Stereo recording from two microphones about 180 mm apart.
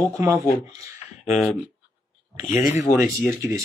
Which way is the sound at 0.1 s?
15° right (ahead or behind).